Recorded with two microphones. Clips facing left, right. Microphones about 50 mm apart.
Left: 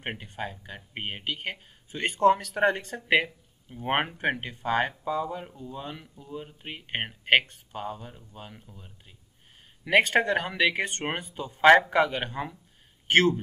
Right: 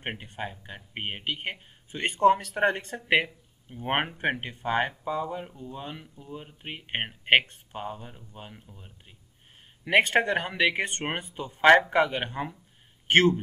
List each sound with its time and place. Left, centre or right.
0.4 s speech: centre
3.7 s speech: centre
9.8 s speech: right
11.6 s a man's voice: centre
11.9 s speech: centre
13.1 s speech: right